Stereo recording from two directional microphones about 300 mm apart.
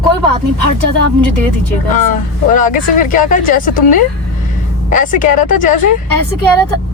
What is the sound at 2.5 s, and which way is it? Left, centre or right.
Speech, left.